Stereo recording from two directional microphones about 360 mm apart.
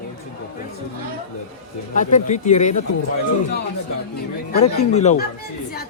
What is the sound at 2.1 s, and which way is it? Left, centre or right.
Speech, left.